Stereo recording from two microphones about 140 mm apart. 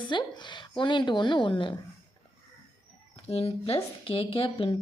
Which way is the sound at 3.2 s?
45° left (ahead or behind).